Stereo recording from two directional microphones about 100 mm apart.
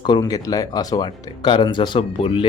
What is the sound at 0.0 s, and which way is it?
Speech, 40° left (ahead or behind).